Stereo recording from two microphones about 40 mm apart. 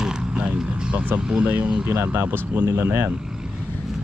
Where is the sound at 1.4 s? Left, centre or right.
Right.